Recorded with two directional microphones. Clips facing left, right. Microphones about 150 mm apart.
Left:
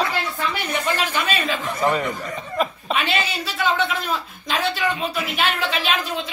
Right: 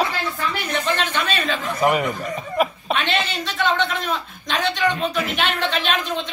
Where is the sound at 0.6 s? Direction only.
10° left (ahead or behind).